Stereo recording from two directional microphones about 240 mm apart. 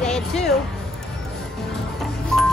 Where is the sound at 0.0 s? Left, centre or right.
Centre.